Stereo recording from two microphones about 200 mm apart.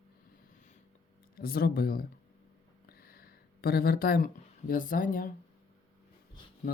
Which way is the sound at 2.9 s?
50° left (ahead or behind).